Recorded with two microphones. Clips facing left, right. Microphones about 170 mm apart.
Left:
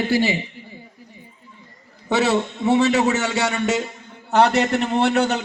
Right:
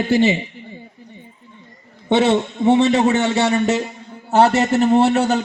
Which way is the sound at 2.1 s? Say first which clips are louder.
Right 4 dB; 30° right (ahead or behind).